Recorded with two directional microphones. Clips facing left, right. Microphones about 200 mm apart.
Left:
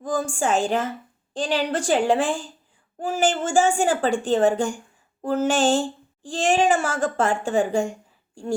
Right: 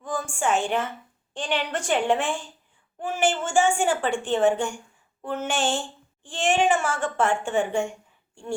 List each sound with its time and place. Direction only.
0.0 s a woman's voice: 35° left (ahead or behind)